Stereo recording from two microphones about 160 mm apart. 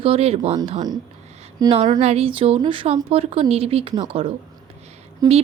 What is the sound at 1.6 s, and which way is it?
A woman's voice, 40° right (ahead or behind).